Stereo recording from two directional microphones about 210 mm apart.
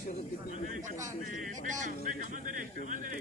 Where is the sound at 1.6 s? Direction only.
35° right (ahead or behind).